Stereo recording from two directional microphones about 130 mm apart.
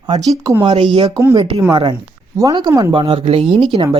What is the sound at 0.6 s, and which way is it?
Speech, 40° right (ahead or behind).